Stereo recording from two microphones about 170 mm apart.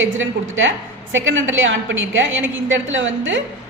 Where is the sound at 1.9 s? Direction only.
90° right.